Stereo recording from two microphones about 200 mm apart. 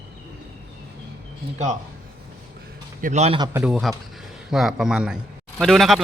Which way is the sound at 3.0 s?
35° right (ahead or behind).